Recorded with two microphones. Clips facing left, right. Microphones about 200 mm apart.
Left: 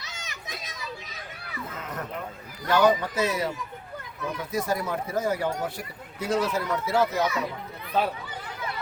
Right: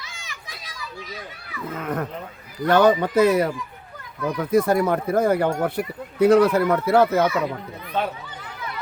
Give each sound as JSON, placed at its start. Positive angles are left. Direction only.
{"t": 0.3, "sound": "children playing", "side_deg": 20}
{"t": 1.8, "sound": "speech", "side_deg": -55}